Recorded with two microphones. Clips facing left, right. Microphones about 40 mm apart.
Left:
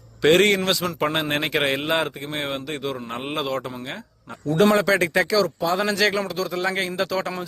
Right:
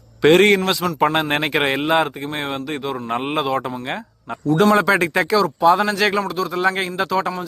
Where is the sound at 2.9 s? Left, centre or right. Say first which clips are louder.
Right 6 dB; right.